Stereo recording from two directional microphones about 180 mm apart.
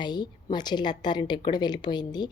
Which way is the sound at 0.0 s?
25° left (ahead or behind).